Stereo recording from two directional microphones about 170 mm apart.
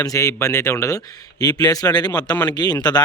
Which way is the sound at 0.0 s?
20° left (ahead or behind).